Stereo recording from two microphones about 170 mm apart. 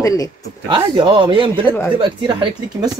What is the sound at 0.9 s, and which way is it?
Speech, 30° right (ahead or behind).